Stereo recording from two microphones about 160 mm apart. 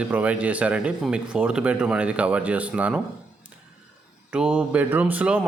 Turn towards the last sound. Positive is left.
turn(degrees=-10)  # may be behind; listen again after turning